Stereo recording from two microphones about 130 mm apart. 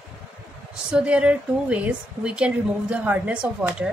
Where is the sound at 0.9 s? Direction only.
5° right (ahead or behind).